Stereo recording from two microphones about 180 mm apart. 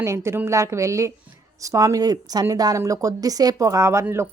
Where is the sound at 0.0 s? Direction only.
15° right (ahead or behind).